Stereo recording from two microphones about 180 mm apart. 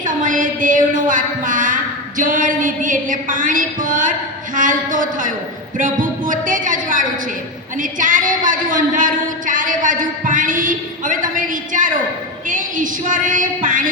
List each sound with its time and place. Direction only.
0.0 s a woman's voice: 45° right (ahead or behind)